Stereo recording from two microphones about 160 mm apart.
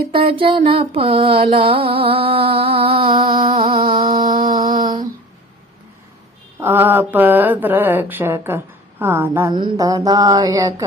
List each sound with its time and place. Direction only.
0.1 s mantra: 35° right (ahead or behind)
6.6 s a sound: 15° right (ahead or behind)
9.5 s mantra: 25° right (ahead or behind)